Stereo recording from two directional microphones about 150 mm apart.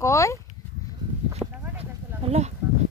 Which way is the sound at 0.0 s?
20° left (ahead or behind).